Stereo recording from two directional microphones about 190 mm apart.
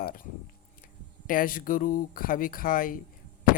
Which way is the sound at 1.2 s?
45° left (ahead or behind).